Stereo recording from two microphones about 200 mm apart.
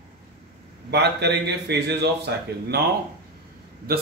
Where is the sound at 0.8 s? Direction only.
55° right (ahead or behind).